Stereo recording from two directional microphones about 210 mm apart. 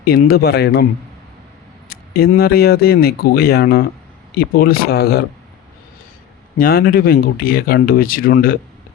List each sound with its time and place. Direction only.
0.0 s speech: 45° left (ahead or behind)
1.9 s speech: 45° left (ahead or behind)
6.6 s speech: 45° left (ahead or behind)